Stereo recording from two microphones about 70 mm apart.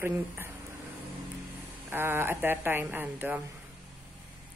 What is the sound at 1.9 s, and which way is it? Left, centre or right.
A woman's voice, right.